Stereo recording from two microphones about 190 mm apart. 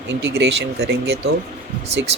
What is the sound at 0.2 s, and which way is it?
Speech, 65° right (ahead or behind).